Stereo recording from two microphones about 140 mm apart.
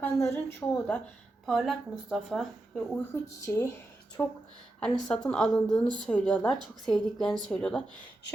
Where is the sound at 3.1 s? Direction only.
20° left (ahead or behind).